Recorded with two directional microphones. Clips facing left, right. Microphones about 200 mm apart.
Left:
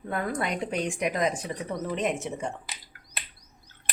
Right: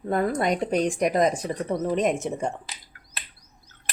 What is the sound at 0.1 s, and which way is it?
Speech, 40° right (ahead or behind).